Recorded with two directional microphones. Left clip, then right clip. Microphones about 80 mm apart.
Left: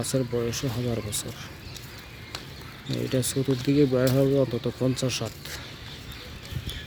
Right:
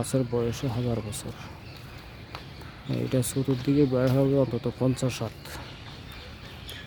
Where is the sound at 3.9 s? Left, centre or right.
Centre.